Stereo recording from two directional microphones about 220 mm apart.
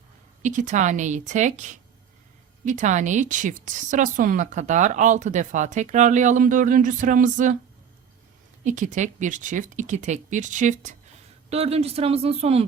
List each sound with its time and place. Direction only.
0.4 s speech: 35° right (ahead or behind)
8.6 s speech: 35° right (ahead or behind)